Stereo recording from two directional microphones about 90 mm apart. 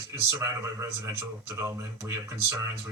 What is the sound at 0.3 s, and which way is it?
A woman's voice, 30° right (ahead or behind).